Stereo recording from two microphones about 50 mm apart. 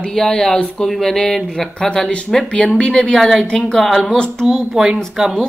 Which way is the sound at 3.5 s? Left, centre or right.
Centre.